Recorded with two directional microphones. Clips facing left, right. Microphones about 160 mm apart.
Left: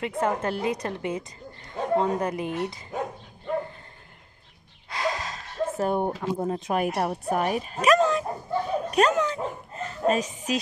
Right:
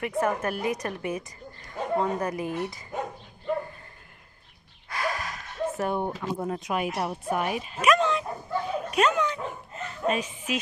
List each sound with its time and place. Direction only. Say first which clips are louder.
0.0 s a woman's voice: even; 25° left (ahead or behind)
4.8 s gasp: left 2 dB; 20° left (ahead or behind)
6.4 s a woman's voice: left 3 dB; 25° left (ahead or behind)
6.7 s speech: left 4 dB; 45° left (ahead or behind)